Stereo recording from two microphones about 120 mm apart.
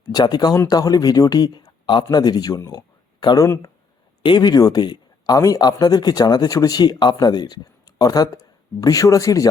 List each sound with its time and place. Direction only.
0.0 s speech: 35° left (ahead or behind)